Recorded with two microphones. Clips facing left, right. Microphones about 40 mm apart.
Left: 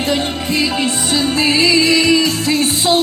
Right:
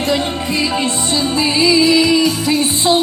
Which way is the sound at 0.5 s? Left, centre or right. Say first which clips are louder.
Left 1 dB; left.